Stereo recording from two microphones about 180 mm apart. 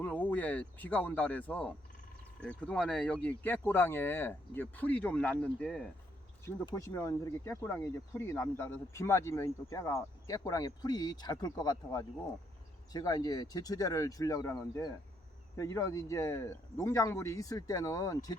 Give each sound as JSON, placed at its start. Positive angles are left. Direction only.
{"t": 0.0, "sound": "speech", "side_deg": 10}
{"t": 6.4, "sound": "speech", "side_deg": 20}